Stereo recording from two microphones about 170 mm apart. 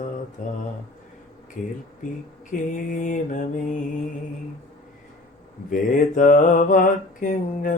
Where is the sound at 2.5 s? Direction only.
50° left (ahead or behind).